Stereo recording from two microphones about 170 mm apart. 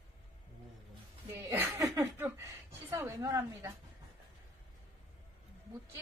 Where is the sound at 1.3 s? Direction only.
15° right (ahead or behind).